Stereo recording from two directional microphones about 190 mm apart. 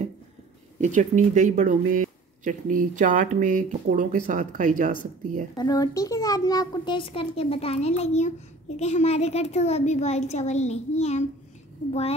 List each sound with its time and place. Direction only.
0.7 s speech: 40° right (ahead or behind)
5.6 s a child's voice: 20° left (ahead or behind)